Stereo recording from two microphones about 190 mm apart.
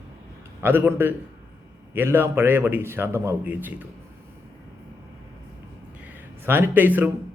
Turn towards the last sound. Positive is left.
turn(degrees=-10)  # may be behind; listen again after turning